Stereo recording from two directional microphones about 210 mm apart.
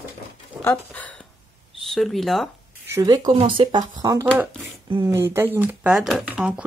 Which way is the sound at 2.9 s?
20° right (ahead or behind).